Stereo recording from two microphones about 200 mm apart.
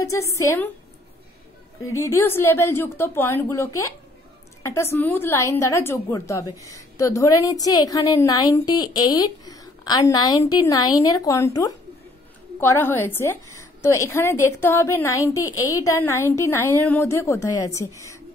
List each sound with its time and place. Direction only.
0.0 s a woman's voice: 15° left (ahead or behind)
2.0 s a woman's voice: 15° left (ahead or behind)